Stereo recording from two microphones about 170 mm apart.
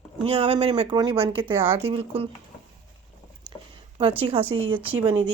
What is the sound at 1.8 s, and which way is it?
Speech, 35° right (ahead or behind).